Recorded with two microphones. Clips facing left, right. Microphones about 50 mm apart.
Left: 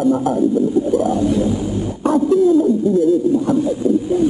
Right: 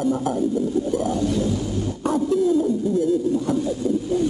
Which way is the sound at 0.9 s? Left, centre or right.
Centre.